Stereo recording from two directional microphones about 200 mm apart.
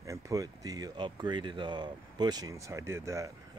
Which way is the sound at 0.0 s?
15° right (ahead or behind).